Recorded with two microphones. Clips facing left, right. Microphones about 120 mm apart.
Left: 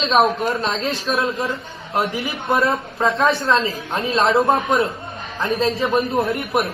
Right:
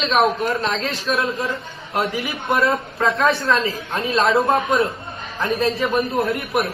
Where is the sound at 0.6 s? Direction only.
25° left (ahead or behind).